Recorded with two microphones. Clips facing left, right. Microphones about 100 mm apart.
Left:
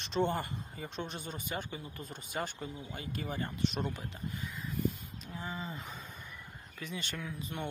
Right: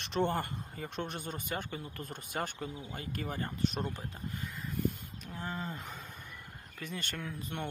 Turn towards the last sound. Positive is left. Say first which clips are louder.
# even
turn(degrees=-55)  # may be behind; listen again after turning